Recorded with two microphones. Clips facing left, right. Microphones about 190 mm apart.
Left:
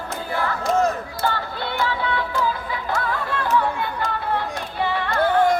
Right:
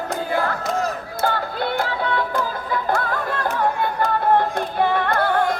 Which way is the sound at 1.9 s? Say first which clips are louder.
Right 2 dB; 50° right (ahead or behind).